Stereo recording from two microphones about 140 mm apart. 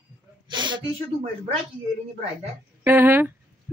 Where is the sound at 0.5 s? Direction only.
35° right (ahead or behind).